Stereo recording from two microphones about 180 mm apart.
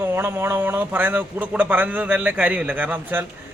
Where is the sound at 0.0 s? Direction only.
15° right (ahead or behind).